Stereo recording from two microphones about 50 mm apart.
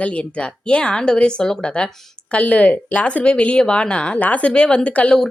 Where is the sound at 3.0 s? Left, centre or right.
Left.